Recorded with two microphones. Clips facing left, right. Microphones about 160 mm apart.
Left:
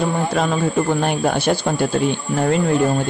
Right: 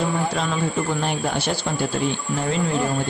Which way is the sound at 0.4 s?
55° left (ahead or behind).